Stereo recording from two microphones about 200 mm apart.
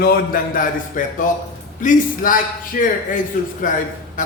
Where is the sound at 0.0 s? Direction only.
45° left (ahead or behind).